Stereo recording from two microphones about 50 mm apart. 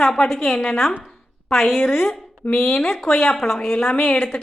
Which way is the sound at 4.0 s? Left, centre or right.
Left.